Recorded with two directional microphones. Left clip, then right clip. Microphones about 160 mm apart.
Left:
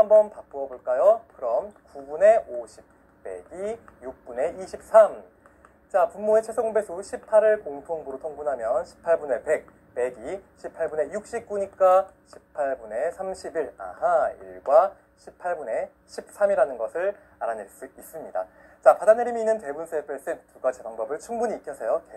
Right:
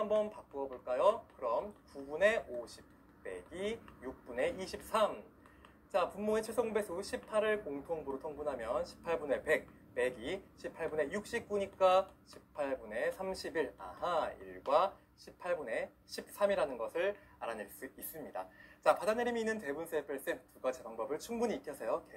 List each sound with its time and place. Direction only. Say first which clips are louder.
0.0 s speech: left 17 dB; 20° right (ahead or behind)